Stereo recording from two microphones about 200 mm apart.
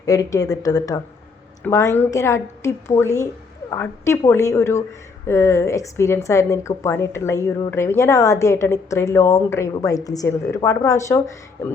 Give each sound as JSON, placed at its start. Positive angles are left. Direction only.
{"t": 0.0, "sound": "a woman's voice", "side_deg": 15}